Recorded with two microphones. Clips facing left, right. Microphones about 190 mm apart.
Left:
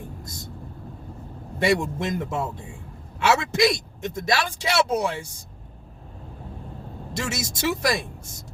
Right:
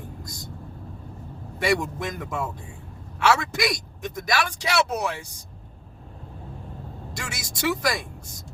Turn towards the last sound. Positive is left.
turn(degrees=25)  # may be behind; listen again after turning